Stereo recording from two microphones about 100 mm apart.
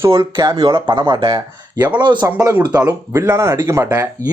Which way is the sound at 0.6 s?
55° right (ahead or behind).